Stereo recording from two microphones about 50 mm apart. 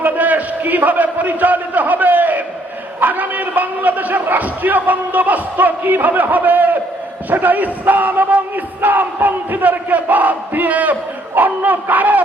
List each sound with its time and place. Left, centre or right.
0.0 s a man's voice: right